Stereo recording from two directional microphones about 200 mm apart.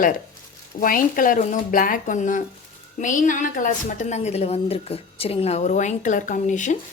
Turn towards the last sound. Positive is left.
turn(degrees=40)  # may be behind; listen again after turning